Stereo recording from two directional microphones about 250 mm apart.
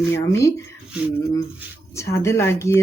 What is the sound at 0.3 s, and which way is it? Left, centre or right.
Speech, centre.